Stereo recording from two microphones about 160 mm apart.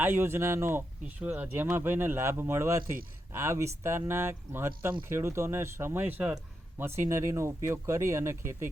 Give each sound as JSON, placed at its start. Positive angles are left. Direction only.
{"t": 0.0, "sound": "a man's voice", "side_deg": -15}